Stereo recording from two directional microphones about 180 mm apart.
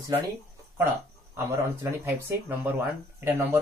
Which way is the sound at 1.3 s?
15° right (ahead or behind).